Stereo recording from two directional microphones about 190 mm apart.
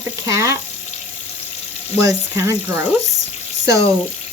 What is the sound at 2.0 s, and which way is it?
Speech, 15° right (ahead or behind).